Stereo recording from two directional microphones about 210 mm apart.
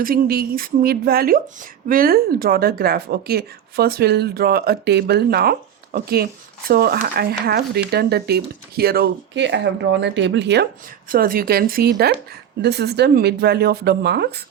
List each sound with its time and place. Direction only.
0.0 s speech: 45° right (ahead or behind)
11.1 s speech: 45° right (ahead or behind)